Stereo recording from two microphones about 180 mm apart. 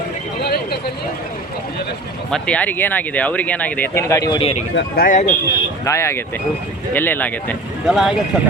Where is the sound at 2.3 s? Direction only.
5° left (ahead or behind).